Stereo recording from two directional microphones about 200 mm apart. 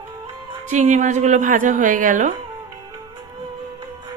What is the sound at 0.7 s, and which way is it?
A woman's voice, 35° right (ahead or behind).